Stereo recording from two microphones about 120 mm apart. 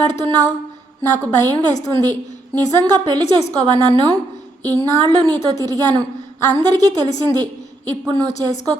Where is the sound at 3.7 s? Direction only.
40° right (ahead or behind).